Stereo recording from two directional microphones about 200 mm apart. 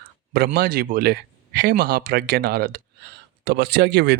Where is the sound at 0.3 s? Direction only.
50° right (ahead or behind).